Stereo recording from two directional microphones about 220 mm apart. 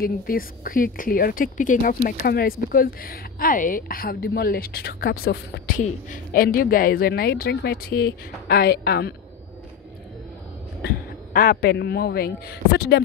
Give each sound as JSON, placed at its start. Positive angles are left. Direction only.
{"t": 0.0, "sound": "a woman's voice", "side_deg": 40}
{"t": 11.3, "sound": "a man's voice", "side_deg": 45}